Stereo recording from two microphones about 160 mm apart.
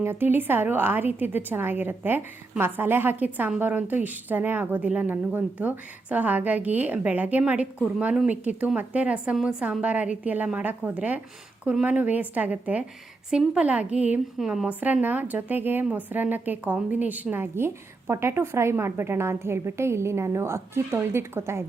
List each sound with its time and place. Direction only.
0.0 s a woman's voice: 15° right (ahead or behind)